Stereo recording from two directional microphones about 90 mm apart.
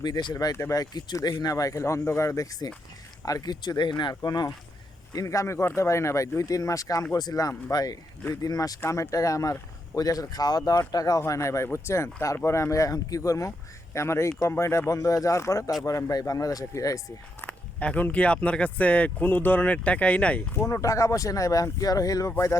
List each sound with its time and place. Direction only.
0.0 s speech: 50° left (ahead or behind)
0.5 s speech: 40° left (ahead or behind); by 4.1 s 60° left (ahead or behind)
4.1 s speech: 45° left (ahead or behind)
5.1 s speech: 35° left (ahead or behind)
17.4 s speech: 15° left (ahead or behind)
20.6 s speech: 30° left (ahead or behind)